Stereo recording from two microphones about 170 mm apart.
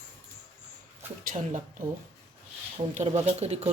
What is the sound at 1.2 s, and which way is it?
Speech, 55° right (ahead or behind).